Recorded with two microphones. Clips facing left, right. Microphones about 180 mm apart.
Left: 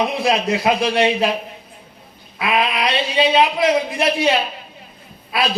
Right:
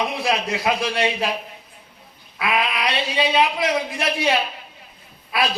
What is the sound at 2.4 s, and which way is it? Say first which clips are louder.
Speech: left 3 dB; 25° left (ahead or behind).